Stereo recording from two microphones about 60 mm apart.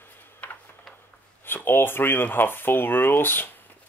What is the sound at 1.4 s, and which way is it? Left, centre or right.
Speech, left.